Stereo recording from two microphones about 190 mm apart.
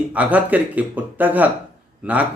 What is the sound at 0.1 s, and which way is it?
Speech, 5° right (ahead or behind).